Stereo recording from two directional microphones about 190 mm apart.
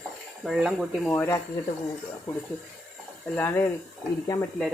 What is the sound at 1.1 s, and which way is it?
Speech, 15° left (ahead or behind).